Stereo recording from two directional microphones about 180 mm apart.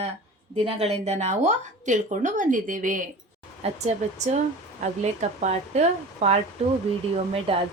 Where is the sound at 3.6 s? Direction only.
35° right (ahead or behind).